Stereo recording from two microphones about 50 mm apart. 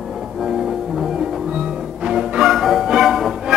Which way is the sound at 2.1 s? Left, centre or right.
Centre.